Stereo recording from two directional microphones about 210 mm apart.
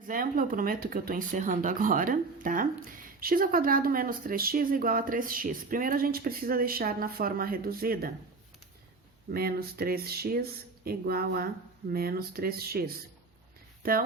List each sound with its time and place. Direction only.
0.1 s speech: 40° right (ahead or behind)
9.3 s speech: 45° right (ahead or behind)
13.8 s speech: 45° right (ahead or behind)